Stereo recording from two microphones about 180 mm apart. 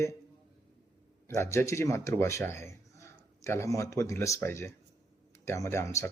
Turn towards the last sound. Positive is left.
turn(degrees=15)  # may be behind; listen again after turning